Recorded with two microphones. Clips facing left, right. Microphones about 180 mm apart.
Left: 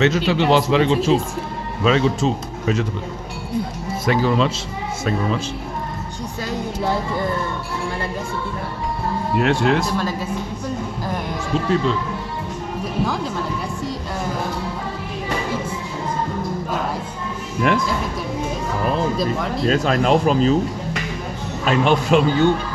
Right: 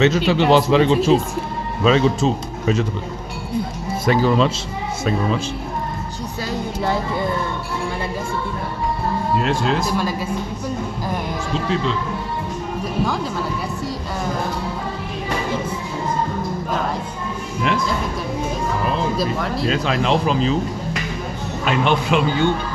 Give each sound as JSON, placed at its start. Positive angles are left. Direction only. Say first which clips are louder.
{"t": 0.0, "sound": "speech", "louder": "right 1 dB", "side_deg": -25}
{"t": 0.5, "sound": "a man's voice", "louder": "right 2 dB", "side_deg": -40}
{"t": 4.0, "sound": "a man's voice", "louder": "right 2 dB", "side_deg": -35}
{"t": 9.4, "sound": "speech", "louder": "left 6 dB", "side_deg": 65}
{"t": 11.7, "sound": "speech", "louder": "left 3 dB", "side_deg": 45}
{"t": 19.1, "sound": "speech", "louder": "even", "side_deg": -5}
{"t": 19.6, "sound": "speech", "louder": "left 4 dB", "side_deg": 45}
{"t": 21.6, "sound": "a man's voice", "louder": "left 2 dB", "side_deg": 40}